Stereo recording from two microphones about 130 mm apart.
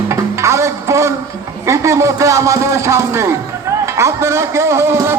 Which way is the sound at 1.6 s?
25° right (ahead or behind).